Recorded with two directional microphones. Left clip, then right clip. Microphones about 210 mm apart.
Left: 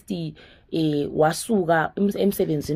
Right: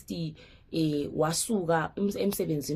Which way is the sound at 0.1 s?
30° left (ahead or behind).